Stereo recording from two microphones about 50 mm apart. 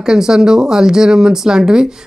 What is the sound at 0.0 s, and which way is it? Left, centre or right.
Speech, centre.